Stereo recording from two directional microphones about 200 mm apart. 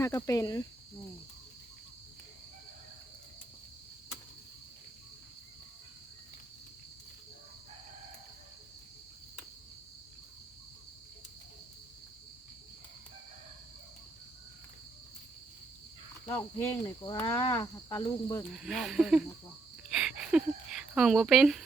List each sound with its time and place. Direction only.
0.0 s speech: 15° left (ahead or behind)
16.2 s speech: 15° left (ahead or behind)
18.5 s speech: centre (ahead or behind)